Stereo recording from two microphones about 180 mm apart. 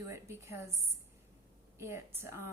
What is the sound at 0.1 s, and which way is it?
Speech, 15° right (ahead or behind).